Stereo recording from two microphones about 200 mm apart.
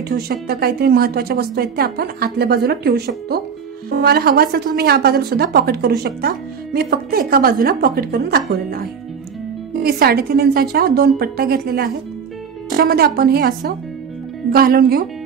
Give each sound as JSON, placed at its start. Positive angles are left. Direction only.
{"t": 0.1, "sound": "a woman's voice", "side_deg": -50}